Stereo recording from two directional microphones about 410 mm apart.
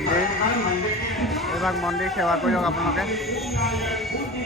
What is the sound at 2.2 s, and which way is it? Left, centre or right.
Speech, centre.